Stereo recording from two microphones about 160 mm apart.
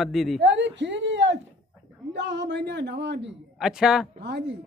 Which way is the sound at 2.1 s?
90° right.